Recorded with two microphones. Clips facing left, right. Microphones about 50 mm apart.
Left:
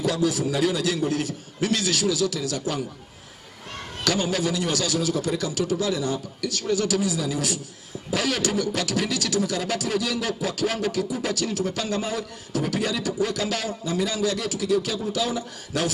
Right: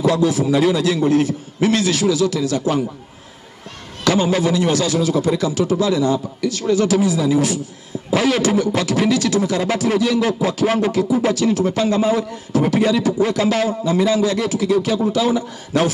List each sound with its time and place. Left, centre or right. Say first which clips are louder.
0.0 s a man's voice: right 7 dB; right
4.0 s a man's voice: right 8 dB; right